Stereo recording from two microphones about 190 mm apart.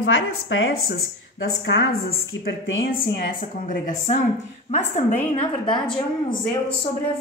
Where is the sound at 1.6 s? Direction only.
65° left (ahead or behind).